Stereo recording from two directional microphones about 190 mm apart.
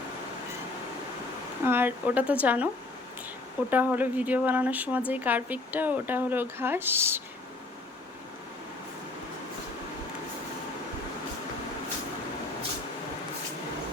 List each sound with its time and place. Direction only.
1.6 s speech: 10° right (ahead or behind)
3.7 s speech: 10° right (ahead or behind)